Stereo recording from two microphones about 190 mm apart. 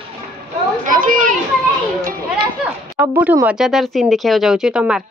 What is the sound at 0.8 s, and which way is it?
Children playing, 45° right (ahead or behind).